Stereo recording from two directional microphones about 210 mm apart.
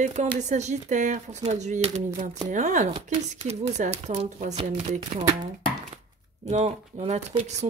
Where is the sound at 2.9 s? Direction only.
25° right (ahead or behind).